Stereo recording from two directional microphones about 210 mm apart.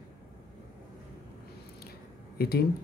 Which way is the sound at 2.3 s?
45° left (ahead or behind).